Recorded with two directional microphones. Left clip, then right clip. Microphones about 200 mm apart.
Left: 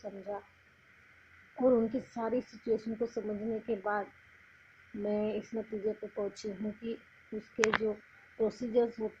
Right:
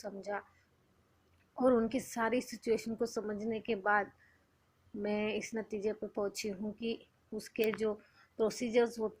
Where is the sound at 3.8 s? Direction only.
30° right (ahead or behind).